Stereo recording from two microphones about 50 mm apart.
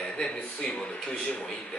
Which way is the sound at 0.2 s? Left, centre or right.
Centre.